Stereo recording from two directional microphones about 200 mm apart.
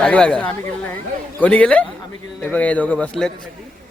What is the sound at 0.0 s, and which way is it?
Speech, 5° left (ahead or behind).